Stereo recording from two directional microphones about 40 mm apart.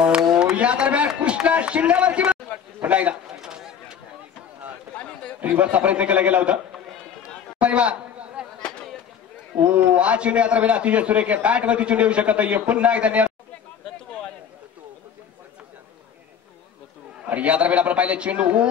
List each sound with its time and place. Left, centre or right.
0.6 s a man's voice: right
3.3 s a sound: centre
4.9 s chatter: left
5.4 s a man's voice: right
7.5 s a sound: right
9.6 s a man's voice: right
17.3 s a man's voice: right